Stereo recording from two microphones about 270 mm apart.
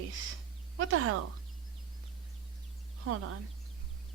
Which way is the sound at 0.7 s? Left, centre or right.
Right.